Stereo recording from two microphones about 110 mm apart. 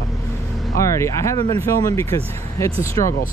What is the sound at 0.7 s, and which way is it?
Speech, 25° left (ahead or behind).